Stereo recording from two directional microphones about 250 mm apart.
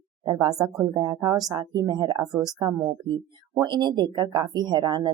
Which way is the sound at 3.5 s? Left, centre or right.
Centre.